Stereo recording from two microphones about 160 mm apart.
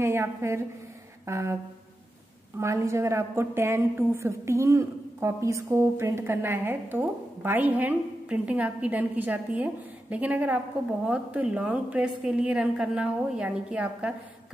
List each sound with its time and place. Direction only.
0.0 s a woman's voice: 15° right (ahead or behind)
1.2 s music: 15° right (ahead or behind)
2.6 s a woman's voice: 20° right (ahead or behind)